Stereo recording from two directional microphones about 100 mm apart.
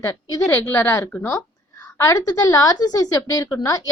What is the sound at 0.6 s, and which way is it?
Speech, 20° left (ahead or behind).